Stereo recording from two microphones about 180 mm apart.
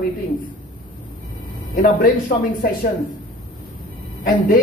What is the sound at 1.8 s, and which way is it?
Speech, 50° left (ahead or behind).